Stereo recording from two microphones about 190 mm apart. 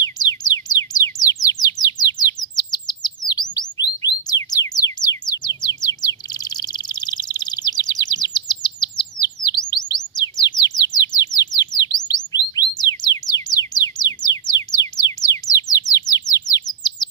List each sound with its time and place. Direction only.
0.0 s bird: 20° left (ahead or behind)
3.8 s music: 20° left (ahead or behind)
5.6 s bird: 20° left (ahead or behind)
11.7 s chirp: 20° left (ahead or behind)
12.4 s bird: 20° left (ahead or behind)
16.4 s chirp: 20° left (ahead or behind)